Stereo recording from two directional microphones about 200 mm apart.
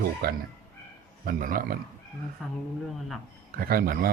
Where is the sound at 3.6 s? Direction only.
45° right (ahead or behind).